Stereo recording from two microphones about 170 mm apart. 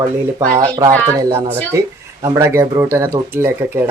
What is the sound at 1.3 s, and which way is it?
Speech, 15° right (ahead or behind).